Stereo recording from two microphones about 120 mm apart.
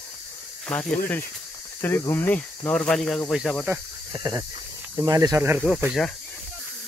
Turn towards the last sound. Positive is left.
turn(degrees=5)  # may be behind; listen again after turning